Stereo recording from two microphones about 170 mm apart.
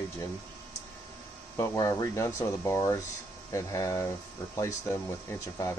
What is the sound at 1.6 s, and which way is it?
Speech, 20° left (ahead or behind).